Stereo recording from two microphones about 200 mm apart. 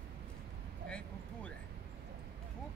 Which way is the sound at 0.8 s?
5° left (ahead or behind).